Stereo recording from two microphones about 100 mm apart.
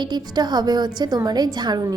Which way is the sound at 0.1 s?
45° right (ahead or behind).